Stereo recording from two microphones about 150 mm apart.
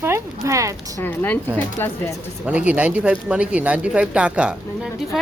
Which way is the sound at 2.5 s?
10° right (ahead or behind).